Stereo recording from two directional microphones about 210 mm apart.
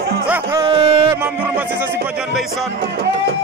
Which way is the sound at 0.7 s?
25° right (ahead or behind).